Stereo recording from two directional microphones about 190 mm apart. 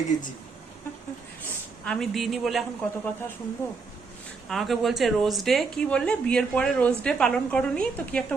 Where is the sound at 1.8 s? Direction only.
5° left (ahead or behind).